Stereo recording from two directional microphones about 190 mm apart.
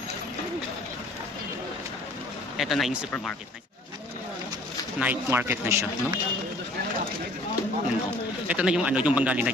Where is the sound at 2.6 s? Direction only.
Centre (ahead or behind).